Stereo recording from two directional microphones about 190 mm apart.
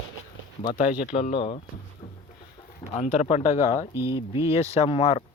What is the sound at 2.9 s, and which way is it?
Speech, 40° left (ahead or behind).